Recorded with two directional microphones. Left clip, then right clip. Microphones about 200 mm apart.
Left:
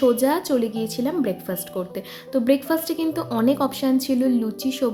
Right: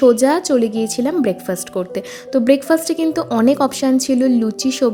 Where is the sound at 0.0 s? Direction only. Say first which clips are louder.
Right 7 dB; 30° right (ahead or behind).